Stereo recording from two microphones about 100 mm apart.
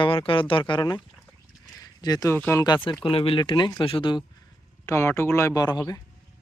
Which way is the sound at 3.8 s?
65° left (ahead or behind).